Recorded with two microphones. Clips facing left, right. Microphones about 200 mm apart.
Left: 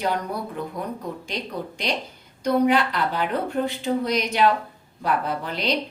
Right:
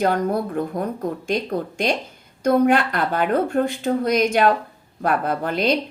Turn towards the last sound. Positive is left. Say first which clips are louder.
# right 6 dB
turn(degrees=-50)  # may be behind; listen again after turning